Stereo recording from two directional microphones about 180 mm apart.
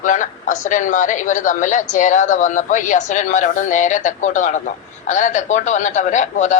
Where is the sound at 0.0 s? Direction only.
45° left (ahead or behind).